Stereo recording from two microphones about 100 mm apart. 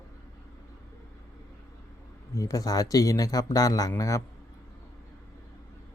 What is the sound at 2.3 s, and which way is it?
Speech, 35° left (ahead or behind).